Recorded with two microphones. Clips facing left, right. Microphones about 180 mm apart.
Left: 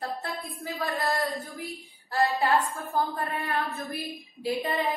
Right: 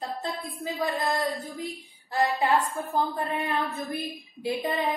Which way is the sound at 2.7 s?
15° right (ahead or behind).